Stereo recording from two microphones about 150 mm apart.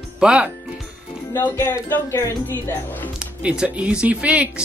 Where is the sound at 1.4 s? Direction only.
20° left (ahead or behind).